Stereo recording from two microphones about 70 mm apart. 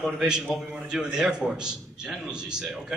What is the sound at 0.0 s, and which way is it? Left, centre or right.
A man's voice, centre.